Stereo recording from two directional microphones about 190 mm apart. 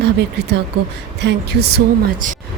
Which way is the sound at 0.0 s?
60° right (ahead or behind).